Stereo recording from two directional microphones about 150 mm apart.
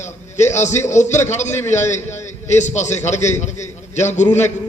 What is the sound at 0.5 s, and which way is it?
A man's voice, 50° left (ahead or behind).